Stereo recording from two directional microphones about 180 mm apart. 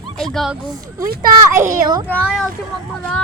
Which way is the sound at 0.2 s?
Centre (ahead or behind).